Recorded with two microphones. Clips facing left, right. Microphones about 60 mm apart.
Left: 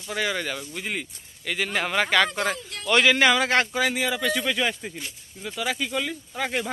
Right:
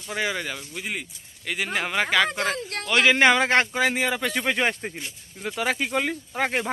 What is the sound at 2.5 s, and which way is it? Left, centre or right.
Speech, right.